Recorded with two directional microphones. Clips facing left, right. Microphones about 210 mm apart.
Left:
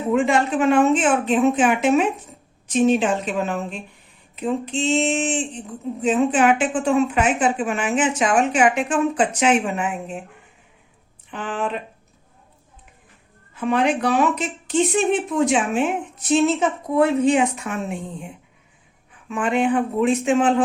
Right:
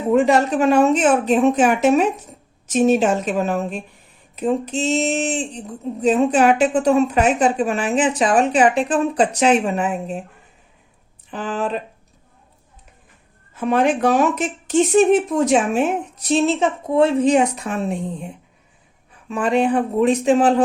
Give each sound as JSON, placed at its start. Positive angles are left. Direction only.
{"t": 0.1, "sound": "speech", "side_deg": -40}
{"t": 11.3, "sound": "speech", "side_deg": -35}
{"t": 13.5, "sound": "speech", "side_deg": -45}
{"t": 19.3, "sound": "speech", "side_deg": -35}